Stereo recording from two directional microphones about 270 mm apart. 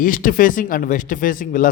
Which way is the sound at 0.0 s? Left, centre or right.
Left.